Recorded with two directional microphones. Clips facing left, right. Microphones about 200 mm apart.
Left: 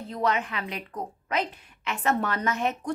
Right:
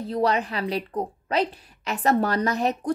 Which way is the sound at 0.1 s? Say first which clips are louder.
Right 4 dB; 35° right (ahead or behind).